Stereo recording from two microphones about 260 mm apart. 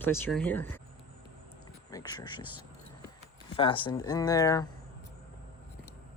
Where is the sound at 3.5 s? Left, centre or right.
Centre.